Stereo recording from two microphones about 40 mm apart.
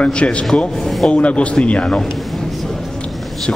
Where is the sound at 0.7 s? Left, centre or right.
Centre.